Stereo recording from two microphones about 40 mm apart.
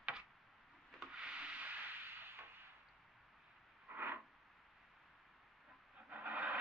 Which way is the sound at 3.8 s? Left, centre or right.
Right.